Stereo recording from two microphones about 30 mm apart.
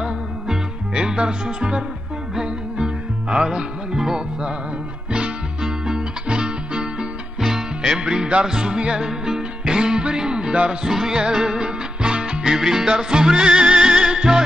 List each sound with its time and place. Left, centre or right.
0.9 s music: right
3.9 s music: centre
5.6 s music: right
7.3 s music: centre
8.0 s music: right
9.0 s music: right
10.9 s music: centre
11.1 s music: right
12.5 s music: centre